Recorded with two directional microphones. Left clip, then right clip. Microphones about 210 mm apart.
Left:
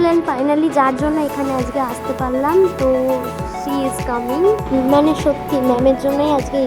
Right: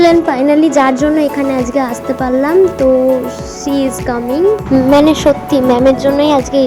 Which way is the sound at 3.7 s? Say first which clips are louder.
Right 6 dB; 15° right (ahead or behind).